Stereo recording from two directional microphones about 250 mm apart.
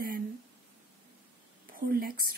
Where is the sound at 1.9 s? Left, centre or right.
Right.